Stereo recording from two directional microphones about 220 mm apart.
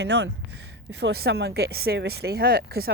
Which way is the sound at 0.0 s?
50° right (ahead or behind).